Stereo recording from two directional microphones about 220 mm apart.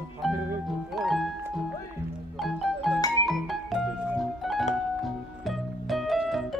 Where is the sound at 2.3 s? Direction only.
Centre (ahead or behind).